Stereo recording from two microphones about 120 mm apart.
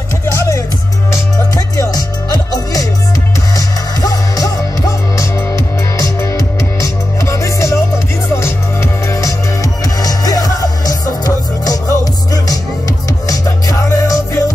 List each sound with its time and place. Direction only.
0.2 s music: 25° left (ahead or behind)
4.0 s music: 30° left (ahead or behind)